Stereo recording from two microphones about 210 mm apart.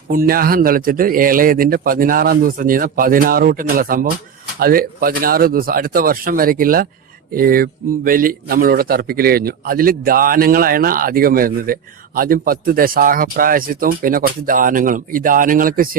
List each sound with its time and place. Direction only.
0.1 s a man's voice: 45° right (ahead or behind)